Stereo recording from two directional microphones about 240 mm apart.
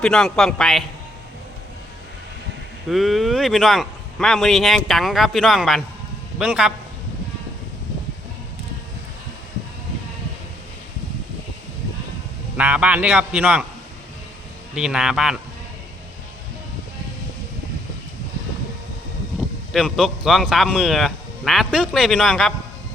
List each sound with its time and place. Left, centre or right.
0.0 s speech: centre
2.9 s speech: centre
12.5 s speech: centre
14.8 s speech: centre
19.7 s speech: centre